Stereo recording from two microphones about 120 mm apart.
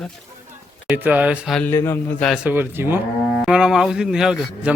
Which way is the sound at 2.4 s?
15° right (ahead or behind).